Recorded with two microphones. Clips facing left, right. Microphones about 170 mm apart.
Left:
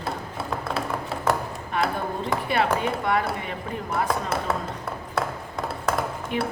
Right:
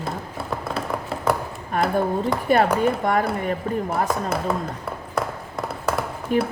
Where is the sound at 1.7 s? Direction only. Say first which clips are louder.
Right 5 dB; 45° right (ahead or behind).